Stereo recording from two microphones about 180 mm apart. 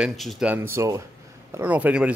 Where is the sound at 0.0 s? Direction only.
Centre (ahead or behind).